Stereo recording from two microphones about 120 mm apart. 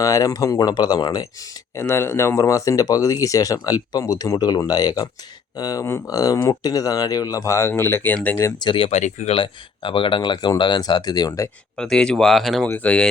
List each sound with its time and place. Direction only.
0.0 s speech: 30° left (ahead or behind)
1.7 s speech: 20° left (ahead or behind)
8.6 s speech: 45° left (ahead or behind)
8.9 s speech: 80° left
9.3 s speech: 45° left (ahead or behind); by 11.4 s 30° left (ahead or behind)
11.8 s speech: 5° left (ahead or behind)
12.6 s speech: 10° left (ahead or behind)